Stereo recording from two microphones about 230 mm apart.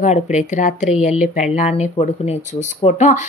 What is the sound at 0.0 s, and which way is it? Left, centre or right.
Speech, left.